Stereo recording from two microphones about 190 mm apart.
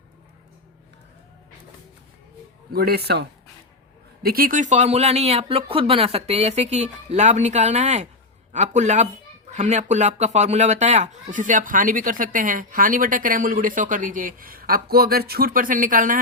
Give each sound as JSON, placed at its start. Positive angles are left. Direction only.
{"t": 2.7, "sound": "speech", "side_deg": -55}